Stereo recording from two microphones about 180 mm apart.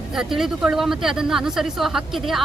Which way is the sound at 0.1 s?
Centre (ahead or behind).